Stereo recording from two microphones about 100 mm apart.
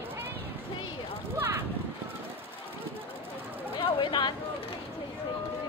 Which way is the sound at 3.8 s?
55° left (ahead or behind).